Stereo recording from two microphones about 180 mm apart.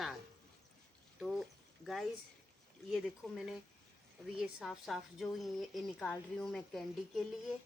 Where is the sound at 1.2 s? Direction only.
Centre (ahead or behind).